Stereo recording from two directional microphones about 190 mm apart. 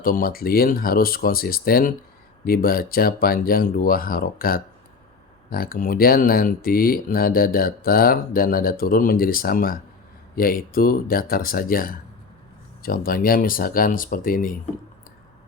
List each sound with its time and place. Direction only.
0.0 s speech: 50° left (ahead or behind)